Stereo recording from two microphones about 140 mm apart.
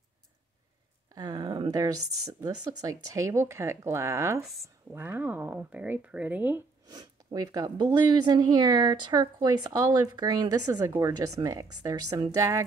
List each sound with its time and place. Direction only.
1.1 s speech: 30° right (ahead or behind); by 6.6 s 15° right (ahead or behind)
6.9 s speech: 30° right (ahead or behind)